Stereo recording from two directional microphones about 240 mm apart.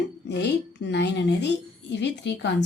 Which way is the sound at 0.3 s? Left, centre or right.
Left.